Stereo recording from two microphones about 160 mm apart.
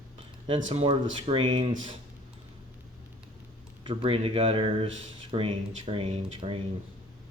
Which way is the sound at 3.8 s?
35° right (ahead or behind).